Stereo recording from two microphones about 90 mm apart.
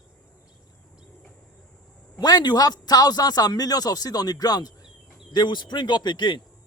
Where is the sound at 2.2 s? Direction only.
50° left (ahead or behind).